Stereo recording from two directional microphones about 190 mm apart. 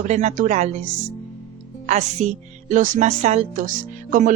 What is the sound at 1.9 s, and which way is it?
A woman's voice, 40° right (ahead or behind).